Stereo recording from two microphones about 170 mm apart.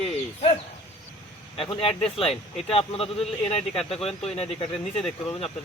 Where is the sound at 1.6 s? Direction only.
35° left (ahead or behind).